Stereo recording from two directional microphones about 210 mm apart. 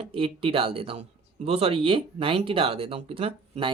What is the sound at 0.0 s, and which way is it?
Speech, 25° right (ahead or behind).